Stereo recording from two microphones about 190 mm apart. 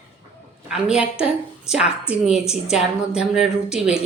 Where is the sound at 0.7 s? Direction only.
5° right (ahead or behind).